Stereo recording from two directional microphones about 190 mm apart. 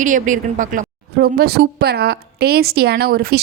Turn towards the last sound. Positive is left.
turn(degrees=-55)  # may be behind; listen again after turning